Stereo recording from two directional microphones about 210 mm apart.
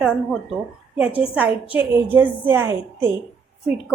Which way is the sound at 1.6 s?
25° left (ahead or behind).